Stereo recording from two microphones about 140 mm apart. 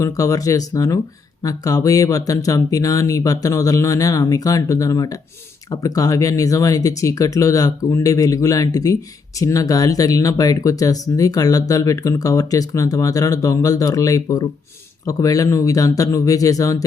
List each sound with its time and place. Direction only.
0.0 s speech: 25° left (ahead or behind)